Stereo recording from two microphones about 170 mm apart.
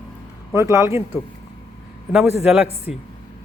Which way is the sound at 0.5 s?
15° right (ahead or behind).